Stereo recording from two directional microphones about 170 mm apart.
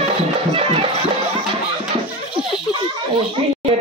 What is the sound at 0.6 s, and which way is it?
Speech, 35° right (ahead or behind).